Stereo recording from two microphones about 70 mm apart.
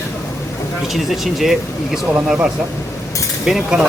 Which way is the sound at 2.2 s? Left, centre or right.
Centre.